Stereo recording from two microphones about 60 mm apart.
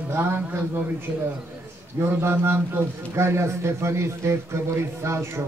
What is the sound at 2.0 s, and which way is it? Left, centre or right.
A man's voice, right.